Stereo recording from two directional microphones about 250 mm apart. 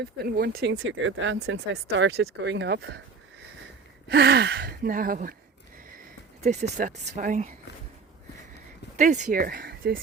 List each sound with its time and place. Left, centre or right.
0.0 s speech: right
4.1 s speech: right
6.4 s speech: right
9.0 s speech: right